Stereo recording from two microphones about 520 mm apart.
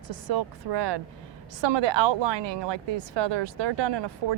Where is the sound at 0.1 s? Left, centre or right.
Right.